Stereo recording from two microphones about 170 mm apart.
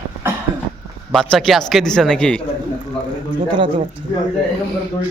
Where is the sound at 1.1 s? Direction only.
Centre (ahead or behind).